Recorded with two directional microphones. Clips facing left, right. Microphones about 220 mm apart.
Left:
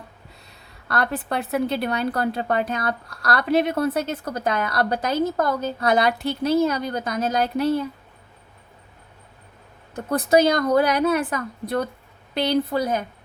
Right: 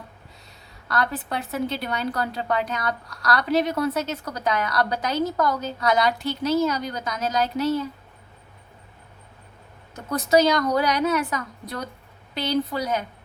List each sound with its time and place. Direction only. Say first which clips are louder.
0.9 s a woman's voice: left 2 dB; 55° left (ahead or behind)
9.9 s a woman's voice: left 2 dB; 55° left (ahead or behind)